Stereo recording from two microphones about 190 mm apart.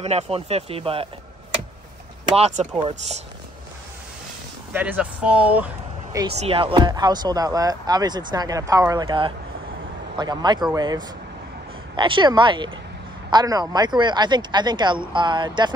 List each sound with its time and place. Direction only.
0.0 s speech: 35° right (ahead or behind)
2.3 s speech: 35° right (ahead or behind)
4.7 s speech: 10° right (ahead or behind)
6.3 s speech: 30° right (ahead or behind)